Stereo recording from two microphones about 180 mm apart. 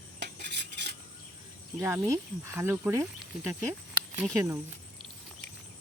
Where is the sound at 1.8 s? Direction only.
15° right (ahead or behind).